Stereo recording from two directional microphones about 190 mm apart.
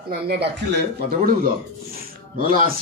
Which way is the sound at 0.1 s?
55° right (ahead or behind).